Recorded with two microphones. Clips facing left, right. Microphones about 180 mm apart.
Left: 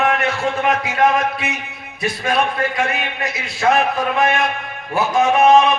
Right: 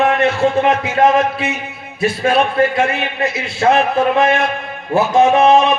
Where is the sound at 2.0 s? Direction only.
25° right (ahead or behind).